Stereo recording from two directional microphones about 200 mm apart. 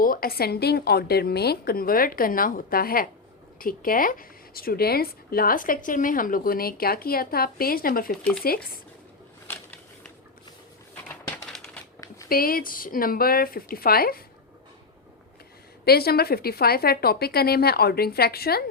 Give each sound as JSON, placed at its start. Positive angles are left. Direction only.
{"t": 0.0, "sound": "speech", "side_deg": 45}
{"t": 8.1, "sound": "speech", "side_deg": 5}
{"t": 8.4, "sound": "speech", "side_deg": 50}
{"t": 11.3, "sound": "crushing", "side_deg": 5}
{"t": 11.9, "sound": "zipper", "side_deg": 15}
{"t": 12.3, "sound": "speech", "side_deg": 45}
{"t": 15.8, "sound": "speech", "side_deg": 50}